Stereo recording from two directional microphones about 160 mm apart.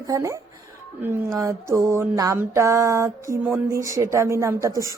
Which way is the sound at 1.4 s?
20° right (ahead or behind).